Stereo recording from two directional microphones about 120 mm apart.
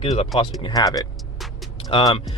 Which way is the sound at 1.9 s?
50° left (ahead or behind).